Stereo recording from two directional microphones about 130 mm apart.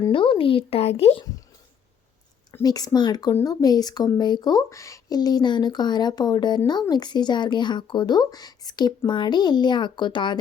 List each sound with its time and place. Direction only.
0.1 s speech: 40° left (ahead or behind)
2.5 s speech: 25° left (ahead or behind)